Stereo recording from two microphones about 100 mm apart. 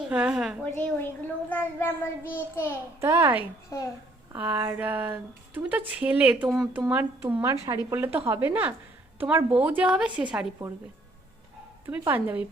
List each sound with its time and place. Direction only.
0.0 s speech: 10° right (ahead or behind)
0.6 s speech: 15° left (ahead or behind)
1.5 s child singing: 20° left (ahead or behind)
3.0 s speech: 25° right (ahead or behind)
3.7 s a child's voice: 30° left (ahead or behind)
4.4 s speech: 15° right (ahead or behind)
7.4 s speech: 30° right (ahead or behind)
7.9 s speech: 20° right (ahead or behind)
11.9 s speech: 20° right (ahead or behind)